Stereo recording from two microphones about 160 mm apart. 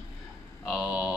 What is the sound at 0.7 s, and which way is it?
Speech, 5° right (ahead or behind).